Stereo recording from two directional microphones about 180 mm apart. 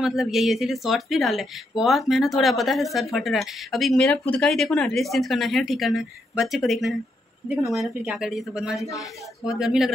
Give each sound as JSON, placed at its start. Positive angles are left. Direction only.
{"t": 0.0, "sound": "speech", "side_deg": 0}
{"t": 8.7, "sound": "speech", "side_deg": 15}
{"t": 9.4, "sound": "speech", "side_deg": -5}